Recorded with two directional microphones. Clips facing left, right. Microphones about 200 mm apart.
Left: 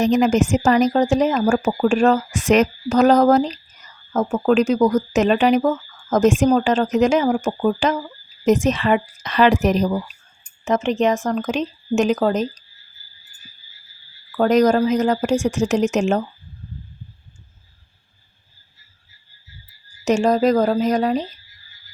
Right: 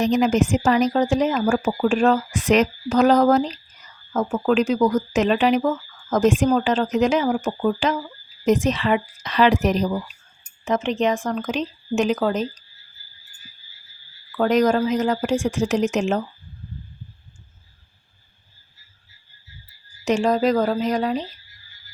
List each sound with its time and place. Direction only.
0.0 s speech: 45° left (ahead or behind)
14.3 s speech: 40° left (ahead or behind)
20.1 s speech: 45° left (ahead or behind)